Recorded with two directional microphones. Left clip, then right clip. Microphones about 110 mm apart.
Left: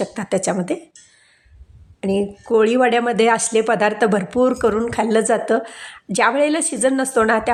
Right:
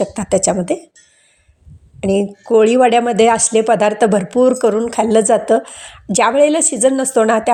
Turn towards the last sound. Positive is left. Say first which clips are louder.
# right 4 dB
turn(degrees=-20)  # may be behind; listen again after turning